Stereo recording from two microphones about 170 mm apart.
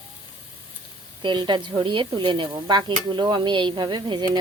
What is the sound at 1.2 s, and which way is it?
Stir, 25° right (ahead or behind).